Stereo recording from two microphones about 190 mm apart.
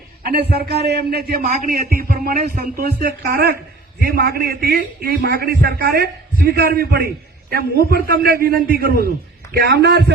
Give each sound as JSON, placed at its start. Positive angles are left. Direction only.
{"t": 0.2, "sound": "a man's voice", "side_deg": -55}